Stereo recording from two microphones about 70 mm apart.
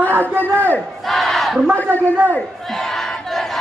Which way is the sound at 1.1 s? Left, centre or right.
Centre.